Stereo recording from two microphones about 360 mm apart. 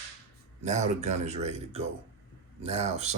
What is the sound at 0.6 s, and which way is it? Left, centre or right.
Speech, centre.